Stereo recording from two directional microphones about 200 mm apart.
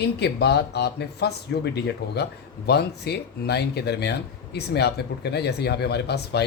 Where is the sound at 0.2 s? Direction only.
55° left (ahead or behind).